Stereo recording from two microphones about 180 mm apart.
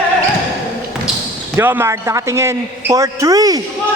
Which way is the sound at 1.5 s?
10° right (ahead or behind).